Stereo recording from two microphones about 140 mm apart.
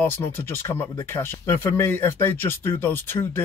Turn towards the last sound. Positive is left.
turn(degrees=15)  # may be behind; listen again after turning